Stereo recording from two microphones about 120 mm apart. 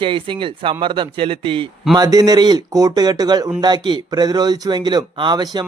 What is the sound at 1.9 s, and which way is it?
Speech, 30° right (ahead or behind).